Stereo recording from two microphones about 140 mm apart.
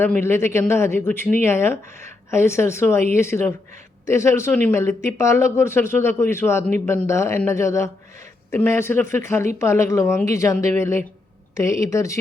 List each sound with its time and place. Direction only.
0.0 s speech: 15° left (ahead or behind)